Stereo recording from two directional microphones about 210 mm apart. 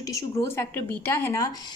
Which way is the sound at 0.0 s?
15° left (ahead or behind).